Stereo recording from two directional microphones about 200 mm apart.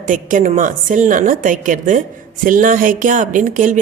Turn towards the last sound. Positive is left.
turn(degrees=-40)  # may be behind; listen again after turning